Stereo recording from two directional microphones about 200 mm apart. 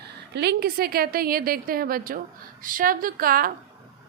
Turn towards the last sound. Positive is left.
turn(degrees=-45)  # may be behind; listen again after turning